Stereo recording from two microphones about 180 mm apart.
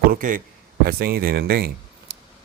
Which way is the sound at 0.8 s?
60° right (ahead or behind).